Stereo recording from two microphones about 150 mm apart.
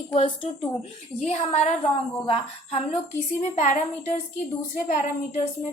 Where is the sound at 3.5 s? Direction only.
50° left (ahead or behind).